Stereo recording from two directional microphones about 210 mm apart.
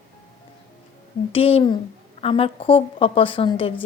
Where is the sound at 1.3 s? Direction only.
25° left (ahead or behind).